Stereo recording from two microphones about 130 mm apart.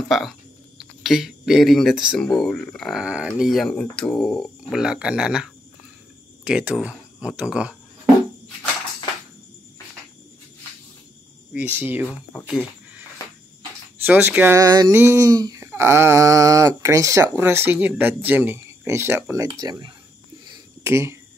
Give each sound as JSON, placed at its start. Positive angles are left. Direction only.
{"t": 0.1, "sound": "speech", "side_deg": 0}
{"t": 11.5, "sound": "speech", "side_deg": -10}
{"t": 14.0, "sound": "speech", "side_deg": -15}
{"t": 14.6, "sound": "a sound", "side_deg": -30}
{"t": 19.6, "sound": "speech", "side_deg": -30}
{"t": 20.8, "sound": "a sound", "side_deg": -20}